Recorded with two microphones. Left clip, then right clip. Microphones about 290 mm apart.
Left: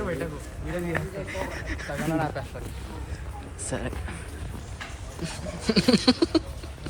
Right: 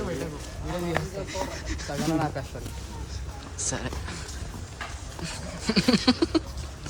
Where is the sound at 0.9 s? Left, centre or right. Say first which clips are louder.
Right 1 dB; centre.